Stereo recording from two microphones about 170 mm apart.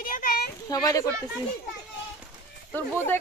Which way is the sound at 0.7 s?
20° left (ahead or behind).